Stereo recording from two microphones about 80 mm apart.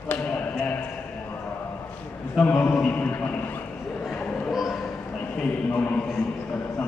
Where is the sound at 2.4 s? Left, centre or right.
Left.